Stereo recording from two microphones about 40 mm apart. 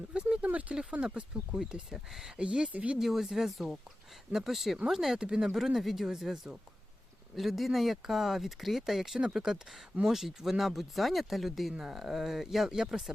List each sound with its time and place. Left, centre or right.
0.1 s a sound: right
0.9 s speech: right; by 2.3 s centre
2.3 s speech: right
2.7 s speech: right
3.0 s speech: centre